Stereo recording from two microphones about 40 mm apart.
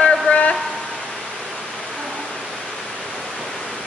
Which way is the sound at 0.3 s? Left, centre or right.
Left.